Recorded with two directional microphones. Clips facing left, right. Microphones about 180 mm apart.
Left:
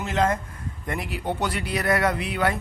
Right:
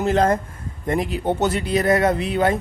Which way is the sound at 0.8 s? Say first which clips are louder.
Right 8 dB; 25° right (ahead or behind).